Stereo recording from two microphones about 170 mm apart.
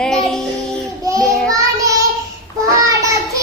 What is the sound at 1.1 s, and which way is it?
Child singing, 20° right (ahead or behind).